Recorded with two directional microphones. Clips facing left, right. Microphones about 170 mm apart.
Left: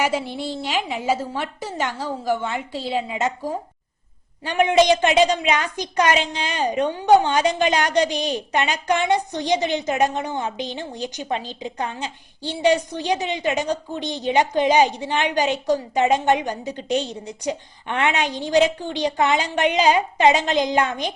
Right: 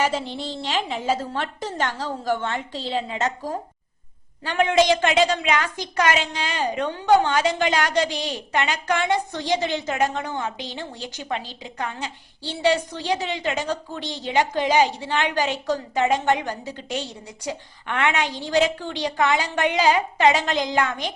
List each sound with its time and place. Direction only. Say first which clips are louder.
0.0 s a woman's voice: left 1 dB; 10° left (ahead or behind)